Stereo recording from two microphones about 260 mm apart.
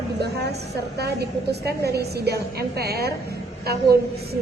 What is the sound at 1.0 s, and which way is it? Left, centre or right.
A woman's voice, right.